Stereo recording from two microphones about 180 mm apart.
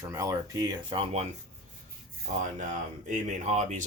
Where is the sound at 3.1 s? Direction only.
40° right (ahead or behind).